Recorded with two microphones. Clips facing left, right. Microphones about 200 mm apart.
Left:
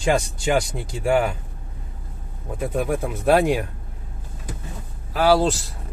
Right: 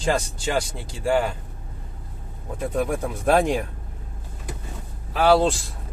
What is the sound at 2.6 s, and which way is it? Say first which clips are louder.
Speech: left 1 dB; 10° left (ahead or behind).